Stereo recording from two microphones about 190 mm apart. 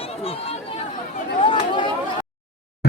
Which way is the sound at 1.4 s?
25° left (ahead or behind).